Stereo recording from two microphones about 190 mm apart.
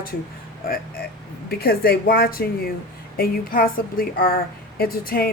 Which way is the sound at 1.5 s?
55° left (ahead or behind).